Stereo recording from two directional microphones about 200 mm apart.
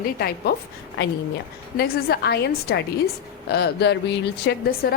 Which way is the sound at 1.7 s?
50° left (ahead or behind).